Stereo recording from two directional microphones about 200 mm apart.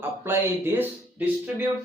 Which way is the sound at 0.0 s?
10° right (ahead or behind).